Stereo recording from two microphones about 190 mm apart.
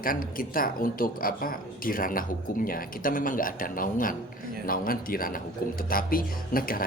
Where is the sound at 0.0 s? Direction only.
50° left (ahead or behind).